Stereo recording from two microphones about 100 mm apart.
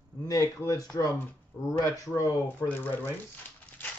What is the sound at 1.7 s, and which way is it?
Speech, 35° left (ahead or behind).